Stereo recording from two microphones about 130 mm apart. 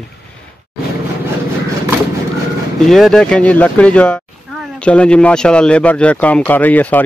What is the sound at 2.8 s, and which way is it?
A man's voice, 5° left (ahead or behind).